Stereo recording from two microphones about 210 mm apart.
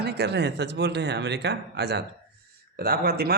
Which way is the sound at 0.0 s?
50° right (ahead or behind).